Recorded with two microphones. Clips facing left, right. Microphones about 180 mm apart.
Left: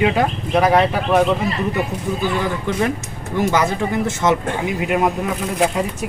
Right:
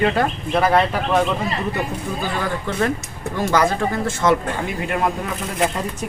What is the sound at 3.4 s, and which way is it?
Speech, 20° left (ahead or behind).